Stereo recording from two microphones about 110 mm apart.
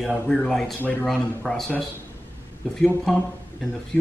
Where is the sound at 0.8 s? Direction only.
15° left (ahead or behind).